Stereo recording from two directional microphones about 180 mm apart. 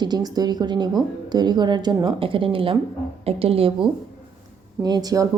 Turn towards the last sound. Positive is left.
turn(degrees=-20)  # may be behind; listen again after turning